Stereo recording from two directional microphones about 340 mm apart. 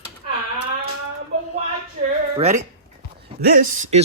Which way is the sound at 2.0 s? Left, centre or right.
Centre.